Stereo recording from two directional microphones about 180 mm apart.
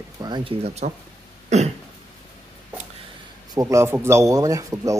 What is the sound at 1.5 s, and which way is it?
Throat clearing, 40° right (ahead or behind).